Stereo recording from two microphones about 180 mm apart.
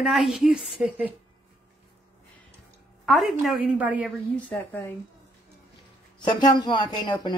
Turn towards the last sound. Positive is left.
turn(degrees=25)  # may be behind; listen again after turning